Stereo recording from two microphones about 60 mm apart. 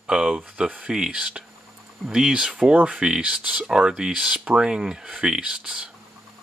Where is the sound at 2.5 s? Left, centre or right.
Right.